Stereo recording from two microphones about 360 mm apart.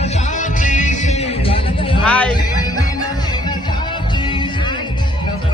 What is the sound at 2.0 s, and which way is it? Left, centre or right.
Music, centre.